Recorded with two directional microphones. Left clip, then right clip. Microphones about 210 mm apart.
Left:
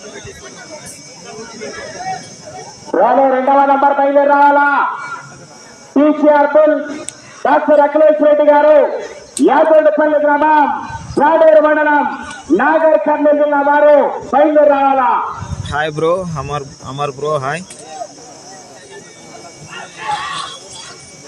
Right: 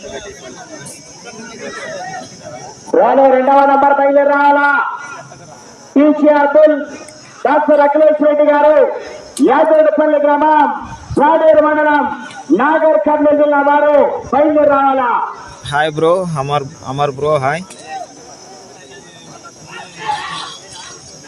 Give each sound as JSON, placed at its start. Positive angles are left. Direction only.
{"t": 2.9, "sound": "a man's voice", "side_deg": -55}
{"t": 5.9, "sound": "a man's voice", "side_deg": -50}
{"t": 15.7, "sound": "speech", "side_deg": -5}
{"t": 19.7, "sound": "a sound", "side_deg": 0}